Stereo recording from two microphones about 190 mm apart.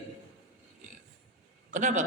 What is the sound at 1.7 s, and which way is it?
Speech, 40° right (ahead or behind).